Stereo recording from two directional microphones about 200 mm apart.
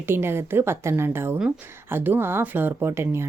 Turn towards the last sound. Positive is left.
turn(degrees=-10)  # may be behind; listen again after turning